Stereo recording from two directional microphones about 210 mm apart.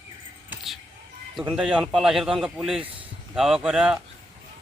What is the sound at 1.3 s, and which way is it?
A man's voice, centre (ahead or behind).